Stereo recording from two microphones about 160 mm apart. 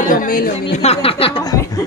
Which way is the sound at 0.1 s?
60° left (ahead or behind).